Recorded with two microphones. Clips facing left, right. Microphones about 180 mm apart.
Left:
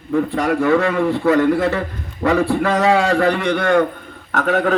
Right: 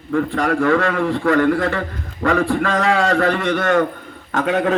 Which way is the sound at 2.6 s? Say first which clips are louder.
Left 2 dB; 15° left (ahead or behind).